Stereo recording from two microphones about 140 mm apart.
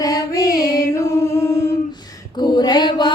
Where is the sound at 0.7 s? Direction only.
20° left (ahead or behind).